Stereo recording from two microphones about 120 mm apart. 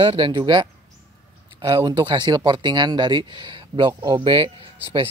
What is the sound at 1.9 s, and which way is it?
Speech, 40° right (ahead or behind).